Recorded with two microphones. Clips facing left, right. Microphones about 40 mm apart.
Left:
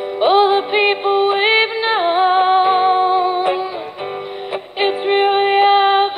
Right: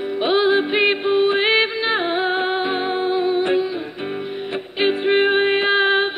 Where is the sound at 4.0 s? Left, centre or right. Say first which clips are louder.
Left 1 dB; centre.